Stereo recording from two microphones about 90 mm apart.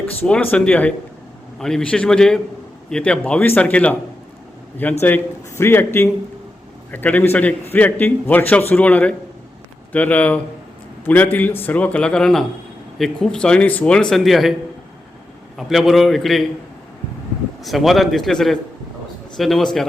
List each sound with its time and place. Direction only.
0.3 s a man's voice: 10° left (ahead or behind)
14.2 s a man's voice: centre (ahead or behind)
15.5 s a man's voice: centre (ahead or behind)
17.6 s a man's voice: centre (ahead or behind)